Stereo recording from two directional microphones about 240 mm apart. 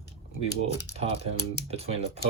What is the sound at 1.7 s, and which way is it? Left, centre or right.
Speech, right.